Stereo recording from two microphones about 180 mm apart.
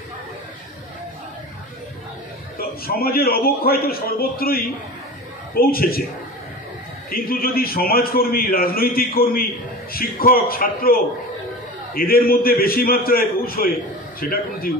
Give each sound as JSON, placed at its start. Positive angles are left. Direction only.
{"t": 2.5, "sound": "a man's voice", "side_deg": 55}
{"t": 7.1, "sound": "a man's voice", "side_deg": 55}